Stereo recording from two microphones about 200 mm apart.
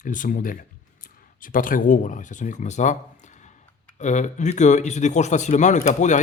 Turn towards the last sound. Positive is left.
turn(degrees=35)  # may be behind; listen again after turning